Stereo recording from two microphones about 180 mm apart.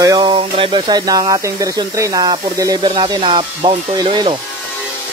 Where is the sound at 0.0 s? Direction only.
25° right (ahead or behind).